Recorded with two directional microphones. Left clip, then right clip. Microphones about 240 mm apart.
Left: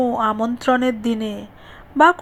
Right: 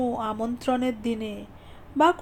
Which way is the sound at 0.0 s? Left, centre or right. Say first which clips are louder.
Left 9 dB; centre.